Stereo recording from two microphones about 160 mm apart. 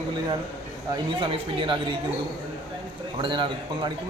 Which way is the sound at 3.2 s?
30° right (ahead or behind).